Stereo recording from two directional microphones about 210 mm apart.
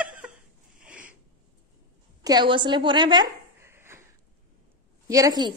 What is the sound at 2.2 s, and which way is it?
Speech, 20° right (ahead or behind).